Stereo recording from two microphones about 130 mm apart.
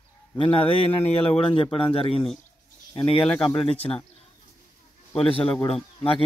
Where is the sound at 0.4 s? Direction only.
45° left (ahead or behind).